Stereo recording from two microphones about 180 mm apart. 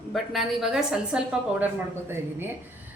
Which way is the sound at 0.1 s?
Centre (ahead or behind).